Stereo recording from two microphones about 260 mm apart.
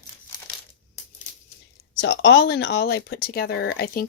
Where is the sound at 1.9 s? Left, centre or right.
Left.